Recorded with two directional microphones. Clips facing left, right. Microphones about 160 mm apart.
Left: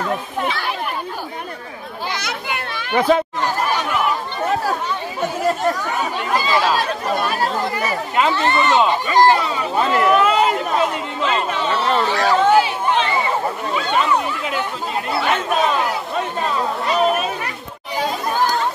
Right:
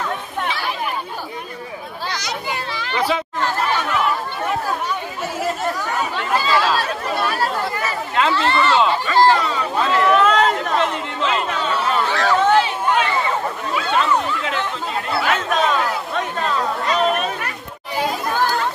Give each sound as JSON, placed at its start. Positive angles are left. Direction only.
{"t": 2.1, "sound": "children playing", "side_deg": 60}
{"t": 3.4, "sound": "chatter", "side_deg": 10}
{"t": 5.9, "sound": "speech", "side_deg": 15}
{"t": 7.2, "sound": "chatter", "side_deg": 15}
{"t": 9.4, "sound": "a sound", "side_deg": 10}
{"t": 12.1, "sound": "chatter", "side_deg": 10}
{"t": 13.7, "sound": "a sound", "side_deg": -5}
{"t": 14.0, "sound": "chatter", "side_deg": 10}
{"t": 15.5, "sound": "speech", "side_deg": 5}